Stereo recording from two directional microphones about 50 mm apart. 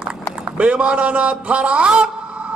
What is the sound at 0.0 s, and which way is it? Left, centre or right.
A man's voice, right.